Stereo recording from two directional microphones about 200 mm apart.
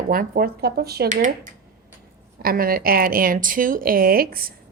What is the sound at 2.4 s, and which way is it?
Speech, 45° right (ahead or behind).